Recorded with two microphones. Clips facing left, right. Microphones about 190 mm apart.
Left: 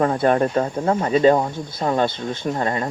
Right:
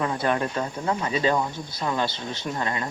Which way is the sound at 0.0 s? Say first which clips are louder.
Left 7 dB; 45° left (ahead or behind).